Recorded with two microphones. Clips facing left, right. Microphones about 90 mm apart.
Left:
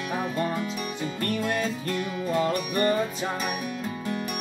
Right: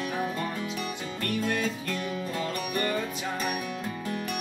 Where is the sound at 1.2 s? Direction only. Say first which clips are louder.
Left 1 dB; 35° left (ahead or behind).